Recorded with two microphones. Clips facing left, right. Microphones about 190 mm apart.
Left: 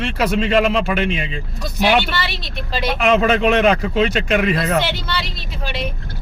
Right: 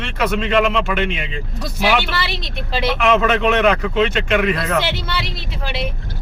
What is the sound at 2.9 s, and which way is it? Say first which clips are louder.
Speech: left 1 dB; 30° left (ahead or behind).